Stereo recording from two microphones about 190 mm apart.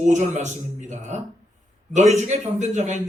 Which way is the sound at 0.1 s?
35° right (ahead or behind).